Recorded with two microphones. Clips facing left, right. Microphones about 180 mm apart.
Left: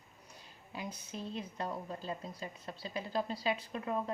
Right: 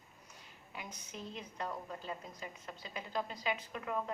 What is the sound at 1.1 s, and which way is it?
Speech, 30° left (ahead or behind).